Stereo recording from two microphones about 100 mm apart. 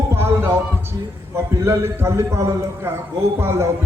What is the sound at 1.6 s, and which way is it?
A man's voice, 25° right (ahead or behind).